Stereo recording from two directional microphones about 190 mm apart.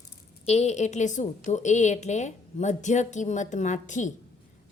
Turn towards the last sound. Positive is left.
turn(degrees=40)  # may be behind; listen again after turning